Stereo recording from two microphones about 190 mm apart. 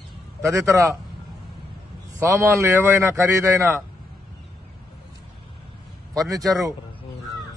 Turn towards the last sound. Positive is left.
turn(degrees=-20)  # may be behind; listen again after turning